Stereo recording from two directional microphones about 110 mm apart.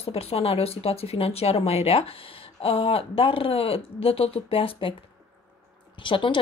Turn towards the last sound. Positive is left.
turn(degrees=50)  # may be behind; listen again after turning